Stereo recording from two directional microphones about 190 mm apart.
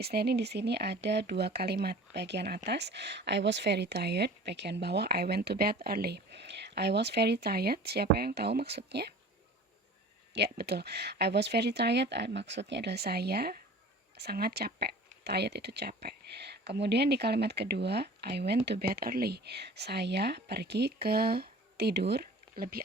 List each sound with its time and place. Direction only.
0.0 s speech: 55° right (ahead or behind)
10.3 s speech: 60° right (ahead or behind)